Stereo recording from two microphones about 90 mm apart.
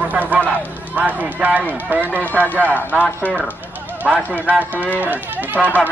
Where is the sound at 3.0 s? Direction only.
20° left (ahead or behind).